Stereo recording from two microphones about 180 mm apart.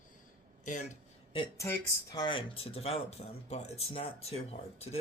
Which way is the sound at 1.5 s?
15° left (ahead or behind).